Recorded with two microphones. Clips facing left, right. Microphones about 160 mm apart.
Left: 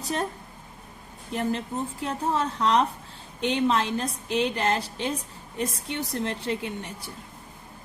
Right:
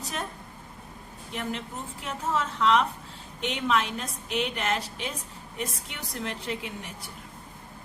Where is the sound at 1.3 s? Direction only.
35° left (ahead or behind).